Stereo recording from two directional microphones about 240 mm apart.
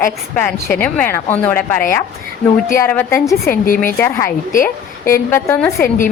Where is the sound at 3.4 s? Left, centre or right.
Left.